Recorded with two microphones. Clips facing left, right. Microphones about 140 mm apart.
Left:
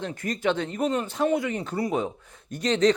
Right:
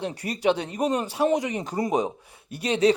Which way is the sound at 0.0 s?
15° right (ahead or behind).